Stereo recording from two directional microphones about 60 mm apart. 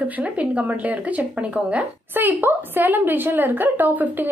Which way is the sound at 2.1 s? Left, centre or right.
Right.